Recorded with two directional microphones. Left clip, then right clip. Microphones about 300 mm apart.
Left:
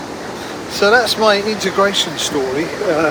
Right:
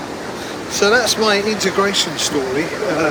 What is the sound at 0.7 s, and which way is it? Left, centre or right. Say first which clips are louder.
Speech: left 2 dB; centre.